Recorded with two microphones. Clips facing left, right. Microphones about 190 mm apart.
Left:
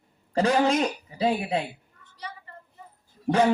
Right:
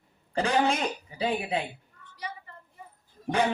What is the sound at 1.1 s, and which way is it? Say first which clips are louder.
Speech: left 4 dB; 35° left (ahead or behind).